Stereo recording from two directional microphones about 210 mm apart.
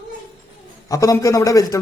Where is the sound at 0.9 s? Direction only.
15° left (ahead or behind).